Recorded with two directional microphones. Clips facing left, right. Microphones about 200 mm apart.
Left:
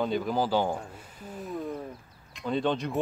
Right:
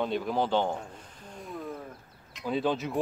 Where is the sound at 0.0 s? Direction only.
Centre (ahead or behind).